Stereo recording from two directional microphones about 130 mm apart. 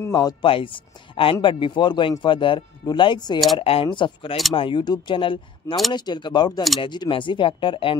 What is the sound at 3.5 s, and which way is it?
Speech, 45° left (ahead or behind).